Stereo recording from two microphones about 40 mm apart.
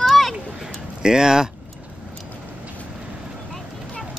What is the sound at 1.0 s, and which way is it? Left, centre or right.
Speech, centre.